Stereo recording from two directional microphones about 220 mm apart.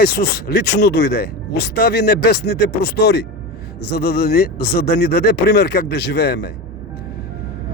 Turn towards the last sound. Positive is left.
turn(degrees=45)  # may be behind; listen again after turning